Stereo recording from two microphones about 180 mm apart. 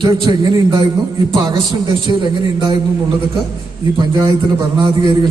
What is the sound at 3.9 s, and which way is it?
A man's voice, 25° right (ahead or behind).